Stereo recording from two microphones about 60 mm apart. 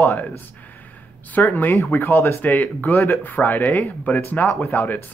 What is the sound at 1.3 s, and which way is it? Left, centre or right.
Speech, left.